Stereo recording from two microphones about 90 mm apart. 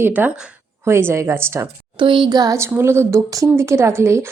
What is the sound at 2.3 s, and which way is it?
Speech, 45° right (ahead or behind).